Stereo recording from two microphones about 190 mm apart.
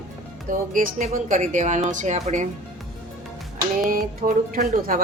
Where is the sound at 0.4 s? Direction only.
45° right (ahead or behind).